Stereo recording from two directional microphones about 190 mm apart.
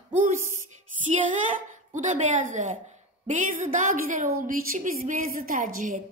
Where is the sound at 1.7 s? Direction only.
40° right (ahead or behind).